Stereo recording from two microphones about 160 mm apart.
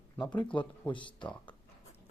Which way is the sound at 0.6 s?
30° left (ahead or behind).